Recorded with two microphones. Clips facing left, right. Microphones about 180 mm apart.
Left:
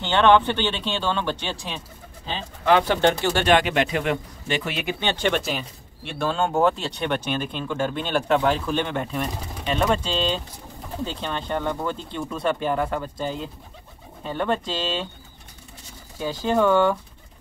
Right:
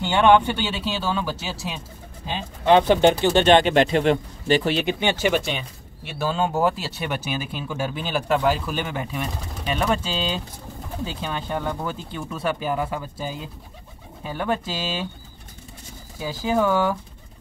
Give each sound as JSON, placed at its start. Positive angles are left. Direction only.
{"t": 0.0, "sound": "speech", "side_deg": -10}
{"t": 2.6, "sound": "speech", "side_deg": -20}
{"t": 5.1, "sound": "speech", "side_deg": -5}
{"t": 16.2, "sound": "speech", "side_deg": -5}